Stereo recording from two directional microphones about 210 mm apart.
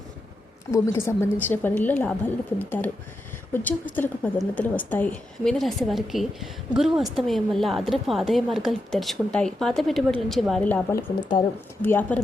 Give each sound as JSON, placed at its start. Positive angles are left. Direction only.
{"t": 0.7, "sound": "a woman's voice", "side_deg": 10}
{"t": 11.2, "sound": "speech", "side_deg": 20}
{"t": 11.8, "sound": "a woman's voice", "side_deg": 10}